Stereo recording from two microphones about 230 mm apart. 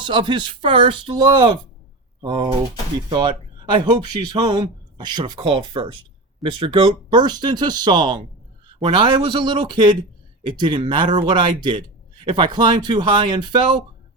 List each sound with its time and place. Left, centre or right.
0.0 s speech: centre